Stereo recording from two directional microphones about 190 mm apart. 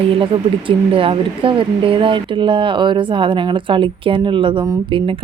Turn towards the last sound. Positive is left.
turn(degrees=-25)  # may be behind; listen again after turning